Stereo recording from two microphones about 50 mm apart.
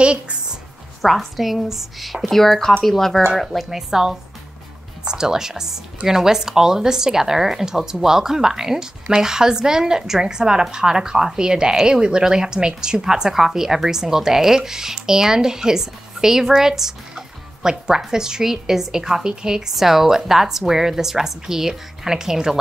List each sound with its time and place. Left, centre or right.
0.0 s a sound: right
1.0 s a woman's voice: centre
3.7 s a woman's voice: centre